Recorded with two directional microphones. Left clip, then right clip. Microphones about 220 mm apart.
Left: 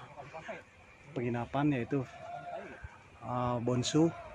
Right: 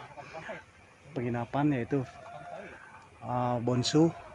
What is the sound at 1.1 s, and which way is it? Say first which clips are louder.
Speech: right 2 dB; 15° right (ahead or behind).